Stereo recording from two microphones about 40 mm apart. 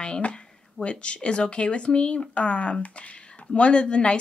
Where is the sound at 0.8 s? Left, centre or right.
Left.